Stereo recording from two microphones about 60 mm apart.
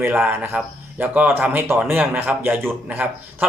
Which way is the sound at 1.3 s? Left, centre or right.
Right.